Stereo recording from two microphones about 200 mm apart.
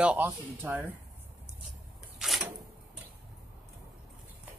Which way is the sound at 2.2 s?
Centre (ahead or behind).